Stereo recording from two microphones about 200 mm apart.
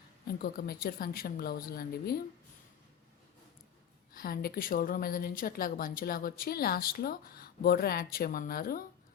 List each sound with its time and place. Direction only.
0.3 s a woman's voice: 50° left (ahead or behind)
4.1 s a woman's voice: 50° left (ahead or behind)